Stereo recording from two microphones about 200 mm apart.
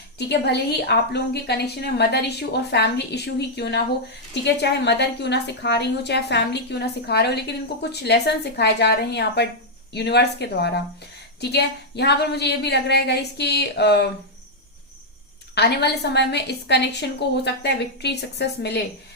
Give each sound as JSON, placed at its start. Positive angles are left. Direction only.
{"t": 0.2, "sound": "a woman's voice", "side_deg": 55}
{"t": 15.5, "sound": "a woman's voice", "side_deg": 55}